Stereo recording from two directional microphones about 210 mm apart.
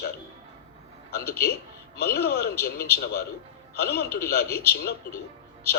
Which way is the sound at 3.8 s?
50° left (ahead or behind).